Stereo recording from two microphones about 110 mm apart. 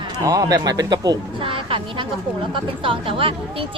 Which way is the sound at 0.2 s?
35° right (ahead or behind).